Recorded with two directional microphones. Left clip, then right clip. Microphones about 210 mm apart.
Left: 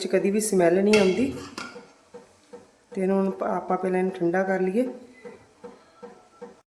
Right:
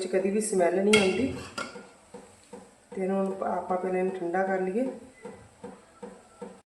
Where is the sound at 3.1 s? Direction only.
50° left (ahead or behind).